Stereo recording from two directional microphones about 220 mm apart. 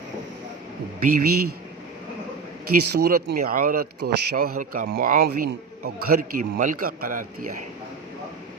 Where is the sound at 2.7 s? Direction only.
40° right (ahead or behind).